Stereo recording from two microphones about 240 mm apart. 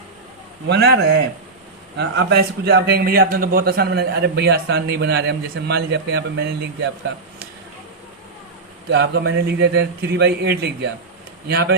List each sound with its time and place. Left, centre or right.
0.7 s a man's voice: right
8.9 s a man's voice: right